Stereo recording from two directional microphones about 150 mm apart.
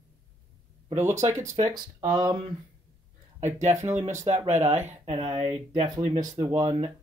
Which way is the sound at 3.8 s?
50° right (ahead or behind).